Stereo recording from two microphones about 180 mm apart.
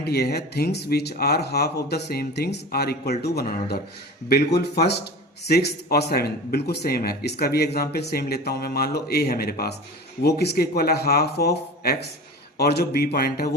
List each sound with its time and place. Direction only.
0.0 s speech: 65° left (ahead or behind)